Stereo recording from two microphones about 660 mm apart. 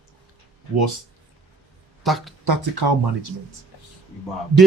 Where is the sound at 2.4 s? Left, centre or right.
Right.